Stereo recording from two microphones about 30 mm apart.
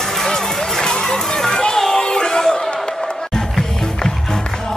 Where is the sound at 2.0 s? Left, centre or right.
Left.